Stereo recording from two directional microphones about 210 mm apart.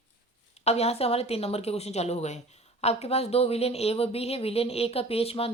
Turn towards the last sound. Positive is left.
turn(degrees=30)  # may be behind; listen again after turning